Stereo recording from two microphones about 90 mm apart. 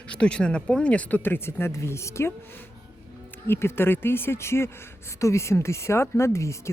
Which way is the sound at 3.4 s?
25° left (ahead or behind).